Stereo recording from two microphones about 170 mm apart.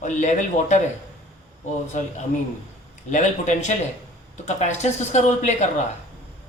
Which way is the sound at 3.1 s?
45° left (ahead or behind).